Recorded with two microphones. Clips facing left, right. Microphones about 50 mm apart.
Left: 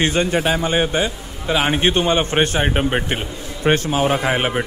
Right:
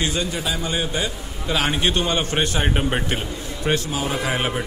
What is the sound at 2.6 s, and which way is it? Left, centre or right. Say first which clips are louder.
A man's voice: left 3 dB; centre.